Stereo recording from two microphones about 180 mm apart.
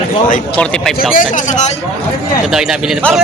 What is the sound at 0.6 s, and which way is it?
Speech, 5° left (ahead or behind).